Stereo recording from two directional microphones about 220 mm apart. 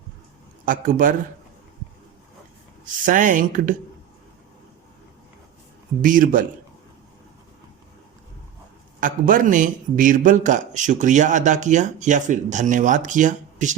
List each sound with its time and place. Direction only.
0.6 s a man's voice: 40° right (ahead or behind)
2.8 s a man's voice: 35° right (ahead or behind)
6.0 s a man's voice: 40° right (ahead or behind)
9.0 s a man's voice: 35° right (ahead or behind)